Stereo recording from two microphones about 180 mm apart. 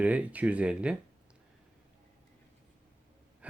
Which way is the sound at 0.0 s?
10° right (ahead or behind).